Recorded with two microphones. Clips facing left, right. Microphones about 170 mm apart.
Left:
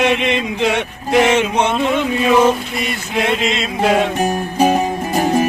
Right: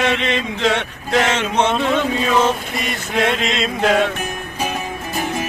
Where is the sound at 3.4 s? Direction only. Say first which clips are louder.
Left 2 dB; 5° left (ahead or behind).